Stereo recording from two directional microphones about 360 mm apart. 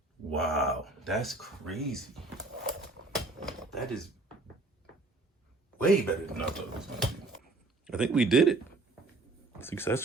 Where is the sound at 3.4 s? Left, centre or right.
Centre.